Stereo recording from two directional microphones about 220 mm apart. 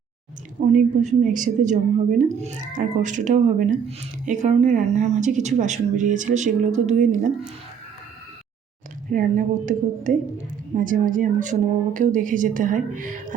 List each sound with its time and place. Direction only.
0.6 s a woman's voice: 35° right (ahead or behind)
9.0 s a woman's voice: 40° right (ahead or behind)